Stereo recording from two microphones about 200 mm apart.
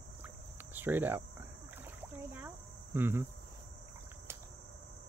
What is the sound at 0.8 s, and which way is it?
Cricket, 10° right (ahead or behind).